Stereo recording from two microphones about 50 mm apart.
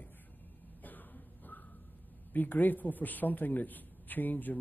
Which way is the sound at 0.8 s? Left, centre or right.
Left.